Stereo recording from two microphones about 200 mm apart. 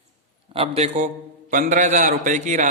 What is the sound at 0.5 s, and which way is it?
A man's voice, 30° right (ahead or behind).